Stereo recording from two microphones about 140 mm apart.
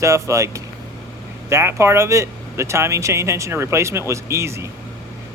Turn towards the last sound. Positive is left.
turn(degrees=-20)  # may be behind; listen again after turning